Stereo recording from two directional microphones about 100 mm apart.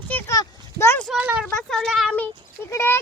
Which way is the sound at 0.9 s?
Centre (ahead or behind).